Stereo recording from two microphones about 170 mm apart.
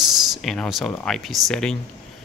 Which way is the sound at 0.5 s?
Centre (ahead or behind).